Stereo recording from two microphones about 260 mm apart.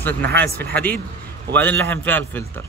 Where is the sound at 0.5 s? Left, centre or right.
Centre.